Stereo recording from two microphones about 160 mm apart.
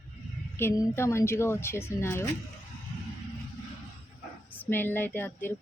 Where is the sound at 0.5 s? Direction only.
15° left (ahead or behind).